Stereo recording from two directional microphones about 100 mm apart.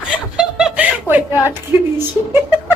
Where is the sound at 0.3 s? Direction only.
10° right (ahead or behind).